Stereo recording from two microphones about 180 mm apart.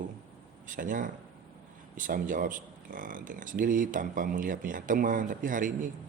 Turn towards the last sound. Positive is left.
turn(degrees=-45)  # may be behind; listen again after turning